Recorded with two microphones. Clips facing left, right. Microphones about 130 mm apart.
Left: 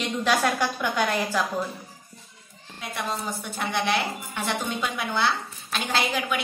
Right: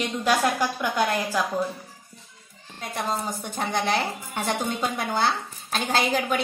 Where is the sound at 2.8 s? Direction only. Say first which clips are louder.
Right 2 dB; 40° right (ahead or behind).